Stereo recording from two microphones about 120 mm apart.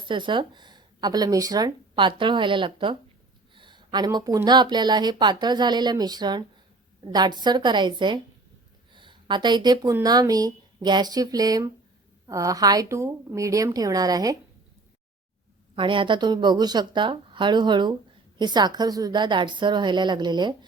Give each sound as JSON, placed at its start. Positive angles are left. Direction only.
{"t": 0.0, "sound": "speech", "side_deg": -40}
{"t": 8.9, "sound": "a sound", "side_deg": -40}
{"t": 10.0, "sound": "a woman's voice", "side_deg": -35}
{"t": 15.7, "sound": "speech", "side_deg": -45}